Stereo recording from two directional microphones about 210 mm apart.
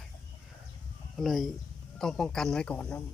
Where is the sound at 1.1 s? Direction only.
Centre (ahead or behind).